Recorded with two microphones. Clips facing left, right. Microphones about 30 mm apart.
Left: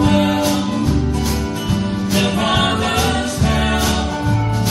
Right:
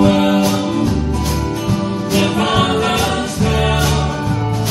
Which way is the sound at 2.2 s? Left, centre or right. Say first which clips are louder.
Right 2 dB; right.